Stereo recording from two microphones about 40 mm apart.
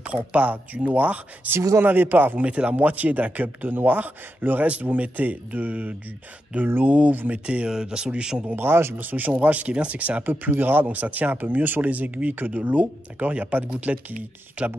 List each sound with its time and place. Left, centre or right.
0.0 s speech: right
1.5 s speech: right
2.4 s speech: right
2.7 s speech: right
7.4 s speech: right
8.5 s speech: right
9.0 s speech: right
10.2 s speech: right